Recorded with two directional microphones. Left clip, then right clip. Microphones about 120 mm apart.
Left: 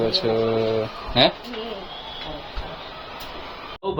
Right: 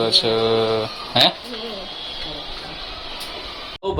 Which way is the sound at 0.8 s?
Centre (ahead or behind).